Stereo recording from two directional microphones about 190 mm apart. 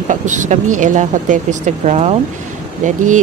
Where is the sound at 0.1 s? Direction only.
40° right (ahead or behind).